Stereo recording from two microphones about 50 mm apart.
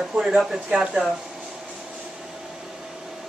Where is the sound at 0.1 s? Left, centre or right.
Right.